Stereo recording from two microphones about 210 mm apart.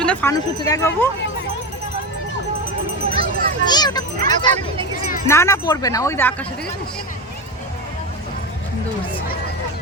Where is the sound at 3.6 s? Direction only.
20° left (ahead or behind).